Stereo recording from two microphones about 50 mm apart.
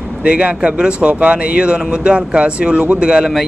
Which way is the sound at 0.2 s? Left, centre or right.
Right.